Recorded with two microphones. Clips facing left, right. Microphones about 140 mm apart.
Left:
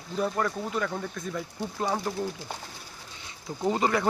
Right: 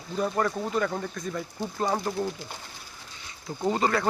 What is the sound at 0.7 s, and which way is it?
Speech, centre (ahead or behind).